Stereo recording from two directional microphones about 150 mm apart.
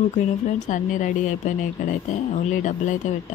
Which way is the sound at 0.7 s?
60° left (ahead or behind).